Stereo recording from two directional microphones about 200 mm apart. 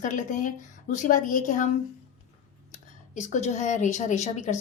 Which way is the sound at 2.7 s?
35° left (ahead or behind).